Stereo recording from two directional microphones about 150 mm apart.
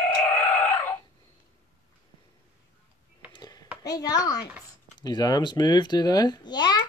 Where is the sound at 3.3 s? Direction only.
25° left (ahead or behind).